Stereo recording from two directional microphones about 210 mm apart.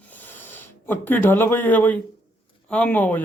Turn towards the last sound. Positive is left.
turn(degrees=5)  # may be behind; listen again after turning